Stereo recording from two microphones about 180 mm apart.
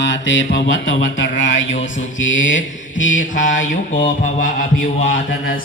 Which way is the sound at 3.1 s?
45° left (ahead or behind).